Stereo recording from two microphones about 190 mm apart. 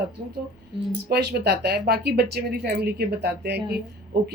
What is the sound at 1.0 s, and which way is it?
A woman's voice, 60° right (ahead or behind).